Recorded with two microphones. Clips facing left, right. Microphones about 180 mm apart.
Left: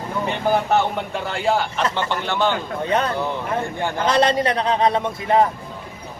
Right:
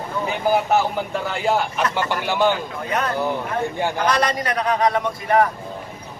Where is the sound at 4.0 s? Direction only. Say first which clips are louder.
Left 5 dB; 25° left (ahead or behind).